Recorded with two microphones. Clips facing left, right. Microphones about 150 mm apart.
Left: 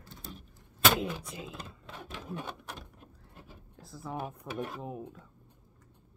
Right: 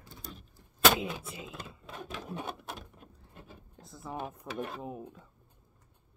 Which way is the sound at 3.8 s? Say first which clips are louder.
Left 1 dB; centre (ahead or behind).